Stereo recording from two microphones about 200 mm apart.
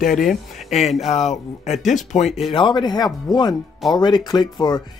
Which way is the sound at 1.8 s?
Centre (ahead or behind).